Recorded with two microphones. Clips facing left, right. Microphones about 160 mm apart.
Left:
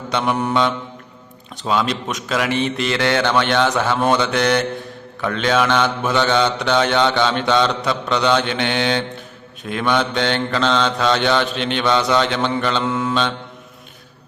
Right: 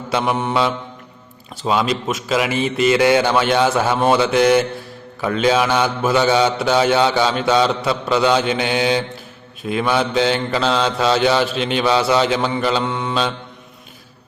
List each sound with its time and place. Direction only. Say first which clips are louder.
0.1 s mantra: even; 5° right (ahead or behind)